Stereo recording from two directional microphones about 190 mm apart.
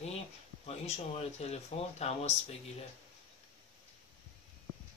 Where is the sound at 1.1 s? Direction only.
35° left (ahead or behind).